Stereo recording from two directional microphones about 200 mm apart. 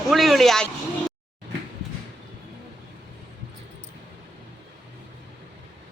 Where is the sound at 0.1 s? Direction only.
Centre (ahead or behind).